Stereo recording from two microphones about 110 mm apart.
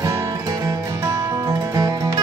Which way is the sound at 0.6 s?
25° right (ahead or behind).